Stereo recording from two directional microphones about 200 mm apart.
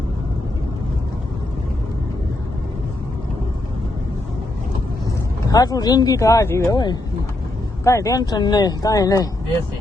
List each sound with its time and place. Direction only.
5.0 s speech: 20° left (ahead or behind)